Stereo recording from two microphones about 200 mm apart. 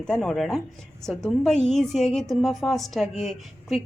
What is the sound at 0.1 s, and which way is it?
A woman's voice, centre (ahead or behind).